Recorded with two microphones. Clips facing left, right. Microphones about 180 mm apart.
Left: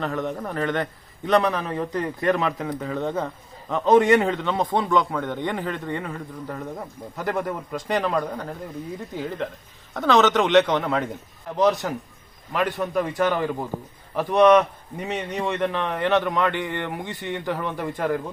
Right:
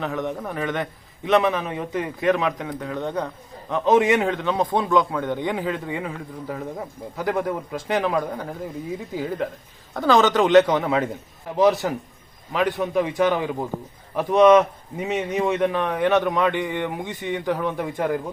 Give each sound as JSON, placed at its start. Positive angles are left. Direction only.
{"t": 0.0, "sound": "a man's voice", "side_deg": 0}
{"t": 14.2, "sound": "a man's voice", "side_deg": -15}
{"t": 14.4, "sound": "a man's voice", "side_deg": -5}